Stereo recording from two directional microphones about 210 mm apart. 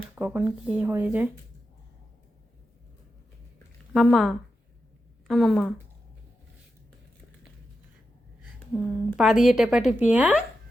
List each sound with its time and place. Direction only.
0.2 s speech: 5° right (ahead or behind)
3.9 s a woman's voice: centre (ahead or behind)
8.5 s a woman's voice: centre (ahead or behind)